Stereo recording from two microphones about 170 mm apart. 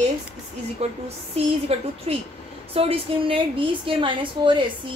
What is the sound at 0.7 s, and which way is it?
A woman's voice, 40° right (ahead or behind).